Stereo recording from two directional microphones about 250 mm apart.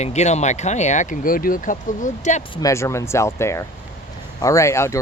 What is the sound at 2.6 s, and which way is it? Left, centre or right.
Speech, centre.